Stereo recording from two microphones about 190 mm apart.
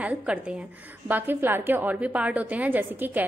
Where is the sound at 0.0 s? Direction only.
5° right (ahead or behind).